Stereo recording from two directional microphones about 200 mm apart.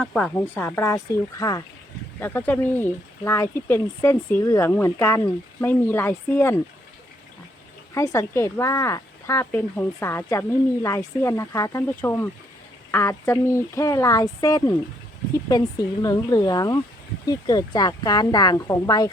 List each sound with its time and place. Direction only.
0.0 s speech: 5° left (ahead or behind)
7.9 s speech: 15° left (ahead or behind)